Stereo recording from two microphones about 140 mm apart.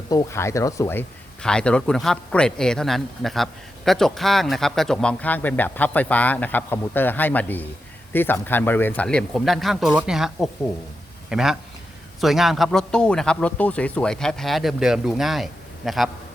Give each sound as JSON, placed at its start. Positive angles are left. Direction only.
{"t": 0.1, "sound": "speech", "side_deg": 25}
{"t": 1.4, "sound": "speech", "side_deg": 5}